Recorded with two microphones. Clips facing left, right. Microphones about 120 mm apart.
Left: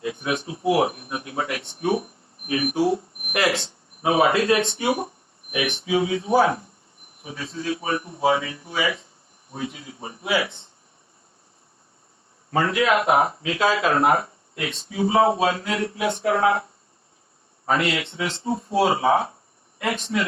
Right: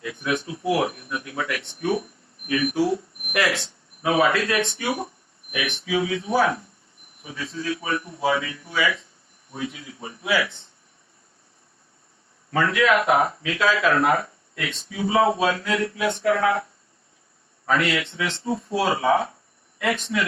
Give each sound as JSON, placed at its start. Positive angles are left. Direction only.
{"t": 0.0, "sound": "speech", "side_deg": 25}
{"t": 2.5, "sound": "a sound", "side_deg": 25}
{"t": 7.3, "sound": "speech", "side_deg": 25}
{"t": 12.5, "sound": "speech", "side_deg": 25}
{"t": 17.7, "sound": "speech", "side_deg": 25}